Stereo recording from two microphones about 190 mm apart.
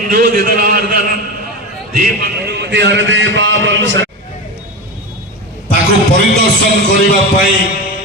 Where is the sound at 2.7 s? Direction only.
65° right (ahead or behind).